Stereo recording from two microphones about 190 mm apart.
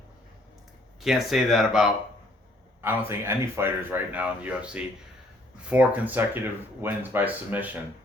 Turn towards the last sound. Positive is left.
turn(degrees=-10)  # may be behind; listen again after turning